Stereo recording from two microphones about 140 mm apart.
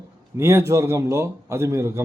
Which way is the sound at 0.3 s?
20° right (ahead or behind).